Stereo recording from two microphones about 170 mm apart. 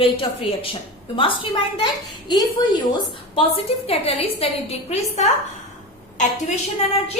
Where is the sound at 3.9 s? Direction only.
35° left (ahead or behind).